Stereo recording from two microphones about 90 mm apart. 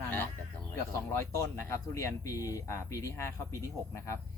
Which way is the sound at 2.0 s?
35° left (ahead or behind).